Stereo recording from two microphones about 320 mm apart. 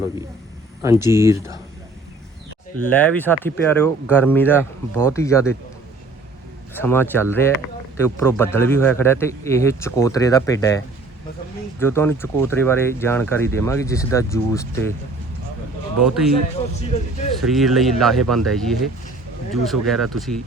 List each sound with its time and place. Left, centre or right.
0.8 s speech: centre
2.8 s speech: centre
6.7 s speech: centre
16.0 s speech: centre
17.4 s speech: centre